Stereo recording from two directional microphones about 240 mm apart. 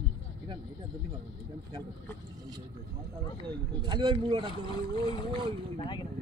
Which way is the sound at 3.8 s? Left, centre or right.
Centre.